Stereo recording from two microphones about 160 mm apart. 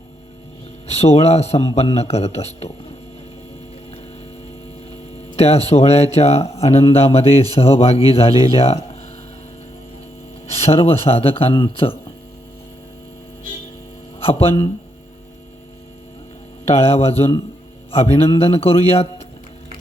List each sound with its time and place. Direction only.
0.9 s speech: 40° left (ahead or behind)
5.4 s speech: 40° left (ahead or behind)
10.7 s speech: 35° left (ahead or behind)
14.3 s speech: 35° left (ahead or behind)
16.6 s speech: 40° left (ahead or behind)